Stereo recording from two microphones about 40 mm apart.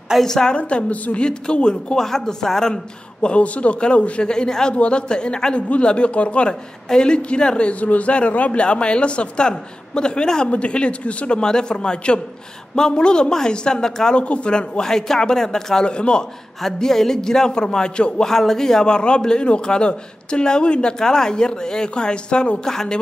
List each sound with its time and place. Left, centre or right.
0.2 s a man's voice: centre
0.5 s a man's voice: left
2.0 s a man's voice: centre; by 4.3 s left
4.3 s a man's voice: centre
7.8 s a man's voice: left; by 14.1 s centre
14.1 s a man's voice: left
16.6 s a man's voice: centre; by 18.2 s left
18.2 s a man's voice: centre
22.7 s a man's voice: centre